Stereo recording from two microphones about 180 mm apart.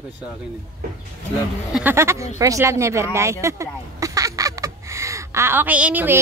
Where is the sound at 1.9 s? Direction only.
15° right (ahead or behind).